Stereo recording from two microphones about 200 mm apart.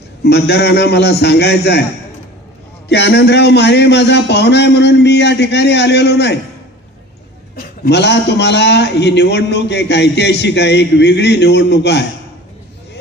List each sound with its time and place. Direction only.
0.3 s a man's voice: 55° left (ahead or behind)
2.9 s a man's voice: 55° left (ahead or behind)
7.5 s a man's voice: 50° left (ahead or behind)